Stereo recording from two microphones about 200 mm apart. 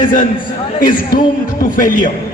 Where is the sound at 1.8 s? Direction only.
40° left (ahead or behind).